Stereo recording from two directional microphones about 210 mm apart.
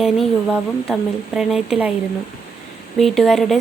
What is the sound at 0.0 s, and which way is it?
Speech, centre (ahead or behind).